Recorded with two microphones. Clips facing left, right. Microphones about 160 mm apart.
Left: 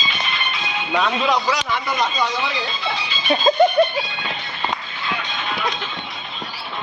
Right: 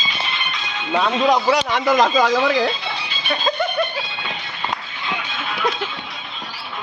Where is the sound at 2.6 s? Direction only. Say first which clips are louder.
Right 4 dB; 65° right (ahead or behind).